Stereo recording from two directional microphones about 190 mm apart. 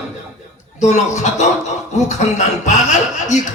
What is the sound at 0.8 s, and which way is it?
Speech, 40° left (ahead or behind).